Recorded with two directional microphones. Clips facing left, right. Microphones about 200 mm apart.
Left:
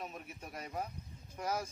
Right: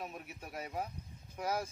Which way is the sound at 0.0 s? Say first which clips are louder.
Right 1 dB; centre (ahead or behind).